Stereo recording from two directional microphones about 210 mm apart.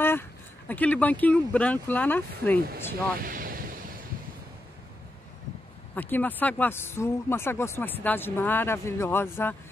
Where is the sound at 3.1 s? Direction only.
40° right (ahead or behind).